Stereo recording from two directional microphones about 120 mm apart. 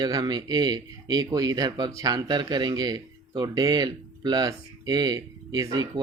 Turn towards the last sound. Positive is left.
turn(degrees=-30)  # may be behind; listen again after turning